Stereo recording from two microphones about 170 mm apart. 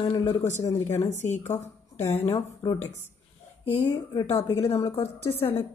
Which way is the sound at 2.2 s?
25° left (ahead or behind).